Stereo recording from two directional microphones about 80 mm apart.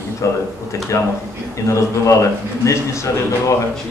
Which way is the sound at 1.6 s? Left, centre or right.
Left.